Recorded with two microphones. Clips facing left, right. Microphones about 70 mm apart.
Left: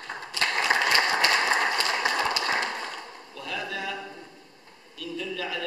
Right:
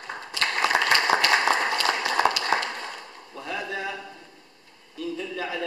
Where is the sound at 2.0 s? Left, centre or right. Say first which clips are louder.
Right 2 dB; left.